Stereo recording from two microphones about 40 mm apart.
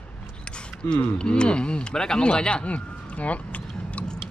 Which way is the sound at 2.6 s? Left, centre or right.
Left.